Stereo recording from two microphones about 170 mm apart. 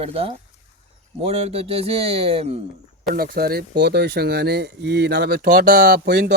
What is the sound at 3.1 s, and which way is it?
Speech, 60° right (ahead or behind).